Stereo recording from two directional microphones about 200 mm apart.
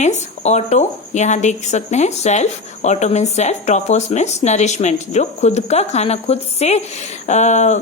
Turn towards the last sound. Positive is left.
turn(degrees=35)  # may be behind; listen again after turning